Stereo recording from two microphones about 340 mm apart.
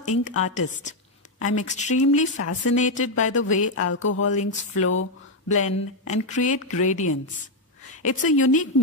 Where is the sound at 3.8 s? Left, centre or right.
Left.